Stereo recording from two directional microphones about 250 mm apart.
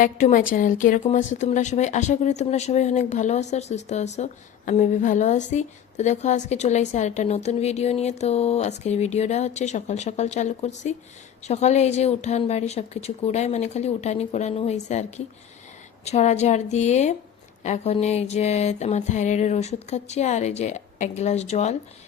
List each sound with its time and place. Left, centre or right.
0.0 s a woman's voice: left
16.0 s a woman's voice: left